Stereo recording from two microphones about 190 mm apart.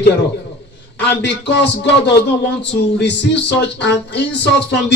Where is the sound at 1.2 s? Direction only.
65° left (ahead or behind).